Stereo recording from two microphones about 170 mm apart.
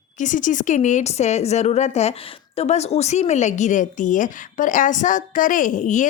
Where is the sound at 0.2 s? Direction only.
50° left (ahead or behind).